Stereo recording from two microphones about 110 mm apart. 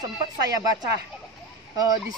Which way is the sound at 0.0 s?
35° right (ahead or behind).